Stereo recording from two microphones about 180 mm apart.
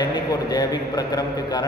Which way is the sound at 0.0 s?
20° left (ahead or behind).